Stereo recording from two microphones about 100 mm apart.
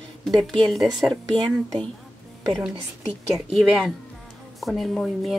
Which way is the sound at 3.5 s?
5° right (ahead or behind).